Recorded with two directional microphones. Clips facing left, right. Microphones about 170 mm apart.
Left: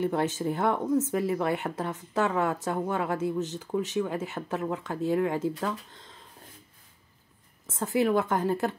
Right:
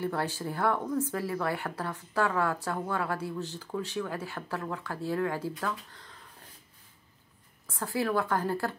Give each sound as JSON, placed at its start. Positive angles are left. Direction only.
{"t": 0.0, "sound": "speech", "side_deg": 20}
{"t": 7.6, "sound": "speech", "side_deg": 20}